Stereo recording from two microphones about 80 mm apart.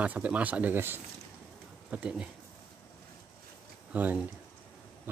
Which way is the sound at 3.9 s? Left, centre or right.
Centre.